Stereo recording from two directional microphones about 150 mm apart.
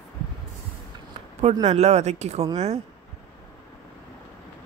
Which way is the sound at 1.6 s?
45° right (ahead or behind).